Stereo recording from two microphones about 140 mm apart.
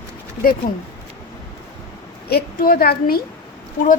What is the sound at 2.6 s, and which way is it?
Speech, 90° left.